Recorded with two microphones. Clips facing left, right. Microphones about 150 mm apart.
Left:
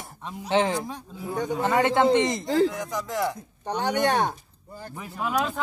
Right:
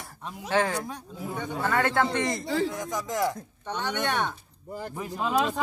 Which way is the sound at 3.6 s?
35° left (ahead or behind).